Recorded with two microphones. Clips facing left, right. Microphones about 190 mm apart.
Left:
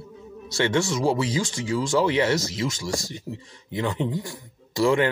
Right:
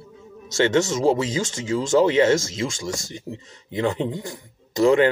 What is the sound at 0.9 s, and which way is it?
Speech, 25° right (ahead or behind).